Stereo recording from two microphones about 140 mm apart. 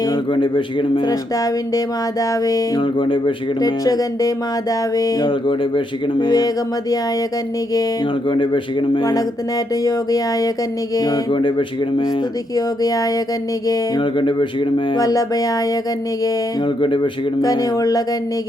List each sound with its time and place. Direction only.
0.0 s speech: 30° left (ahead or behind)
8.3 s music: 35° left (ahead or behind)
9.8 s speech: 25° left (ahead or behind)
10.9 s music: 25° left (ahead or behind)
12.5 s speech: 25° left (ahead or behind)